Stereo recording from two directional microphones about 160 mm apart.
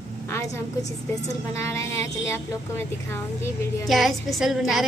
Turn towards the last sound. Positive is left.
turn(degrees=0)  # may be behind; listen again after turning